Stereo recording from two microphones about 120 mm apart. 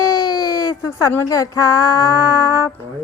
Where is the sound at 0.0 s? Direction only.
30° left (ahead or behind).